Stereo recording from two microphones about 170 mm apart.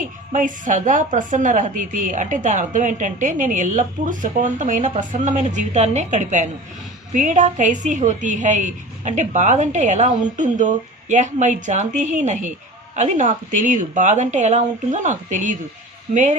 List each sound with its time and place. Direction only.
0.0 s a woman's voice: 50° right (ahead or behind)